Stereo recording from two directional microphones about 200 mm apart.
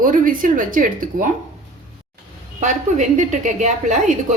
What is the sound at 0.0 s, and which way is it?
Speech, 45° right (ahead or behind).